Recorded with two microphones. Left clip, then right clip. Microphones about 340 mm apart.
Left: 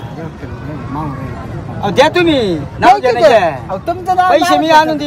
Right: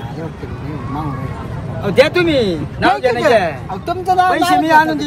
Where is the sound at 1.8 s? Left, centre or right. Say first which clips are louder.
Left 2 dB; left.